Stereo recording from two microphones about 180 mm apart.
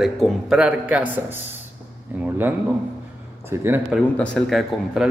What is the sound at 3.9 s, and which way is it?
Speech, 5° left (ahead or behind).